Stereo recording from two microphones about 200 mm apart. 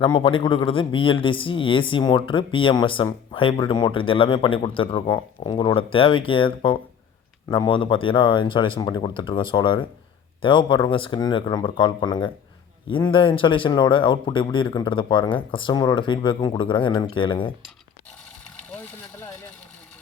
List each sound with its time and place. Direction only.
0.0 s speech: 25° left (ahead or behind)